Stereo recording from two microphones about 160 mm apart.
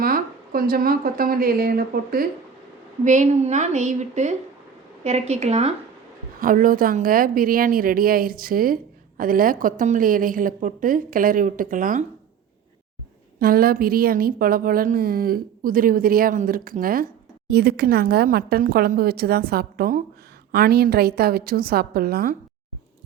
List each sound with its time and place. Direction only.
0.0 s a woman's voice: 65° right (ahead or behind)
3.0 s a woman's voice: 50° right (ahead or behind)
6.4 s a woman's voice: 60° right (ahead or behind)
13.4 s a woman's voice: 70° right (ahead or behind)
17.5 s speech: 75° right (ahead or behind)